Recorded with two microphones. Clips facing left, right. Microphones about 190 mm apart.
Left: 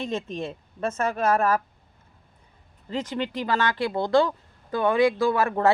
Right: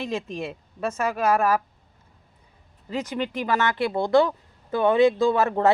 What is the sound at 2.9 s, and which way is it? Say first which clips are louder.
Speech: right 1 dB; 15° right (ahead or behind).